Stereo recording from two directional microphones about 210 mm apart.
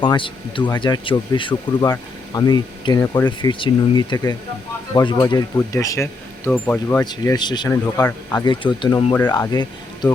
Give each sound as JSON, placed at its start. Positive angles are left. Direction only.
{"t": 0.0, "sound": "speech", "side_deg": 20}
{"t": 7.0, "sound": "speech", "side_deg": 20}
{"t": 8.4, "sound": "speech", "side_deg": 20}